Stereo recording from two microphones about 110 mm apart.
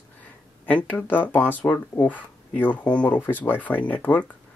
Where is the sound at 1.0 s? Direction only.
15° left (ahead or behind).